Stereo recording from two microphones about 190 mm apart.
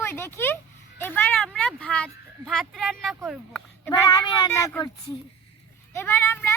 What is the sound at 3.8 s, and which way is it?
Speech, 15° left (ahead or behind).